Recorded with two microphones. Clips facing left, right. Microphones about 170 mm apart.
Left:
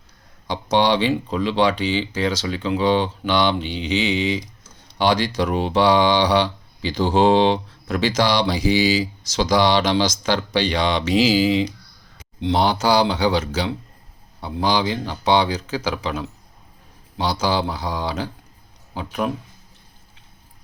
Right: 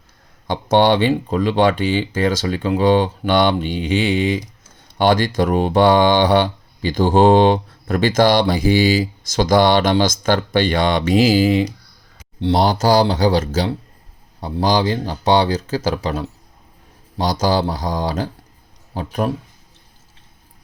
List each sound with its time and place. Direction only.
0.4 s speech: 50° right (ahead or behind)
12.4 s speech: 35° right (ahead or behind)